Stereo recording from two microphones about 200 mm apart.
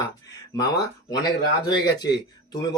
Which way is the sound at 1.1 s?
20° left (ahead or behind).